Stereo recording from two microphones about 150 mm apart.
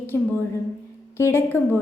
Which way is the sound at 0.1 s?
20° left (ahead or behind).